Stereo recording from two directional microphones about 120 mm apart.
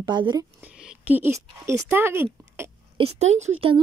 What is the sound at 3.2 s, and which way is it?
Speech, 70° right (ahead or behind).